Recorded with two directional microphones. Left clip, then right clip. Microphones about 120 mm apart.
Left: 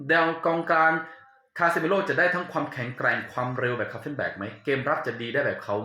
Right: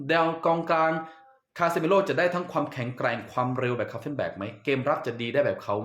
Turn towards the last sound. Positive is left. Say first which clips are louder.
# right 1 dB
turn(degrees=-30)  # may be behind; listen again after turning